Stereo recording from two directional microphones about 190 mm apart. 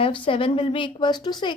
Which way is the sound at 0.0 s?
30° left (ahead or behind).